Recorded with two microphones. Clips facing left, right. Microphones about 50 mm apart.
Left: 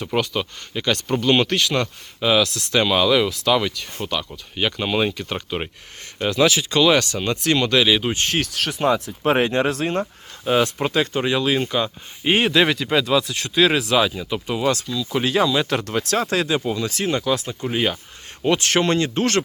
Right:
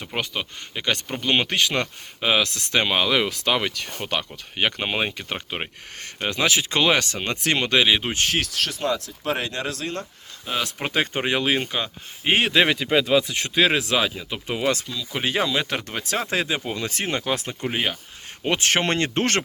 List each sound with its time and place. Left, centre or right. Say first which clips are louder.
0.0 s speech: left 6 dB; centre
1.5 s speech: left 2 dB; right
8.2 s speech: left 1 dB; centre
8.8 s speech: left 6 dB; left
10.8 s speech: left 3 dB; right
11.7 s speech: left 5 dB; centre
14.8 s speech: left 5 dB; centre; by 19.4 s right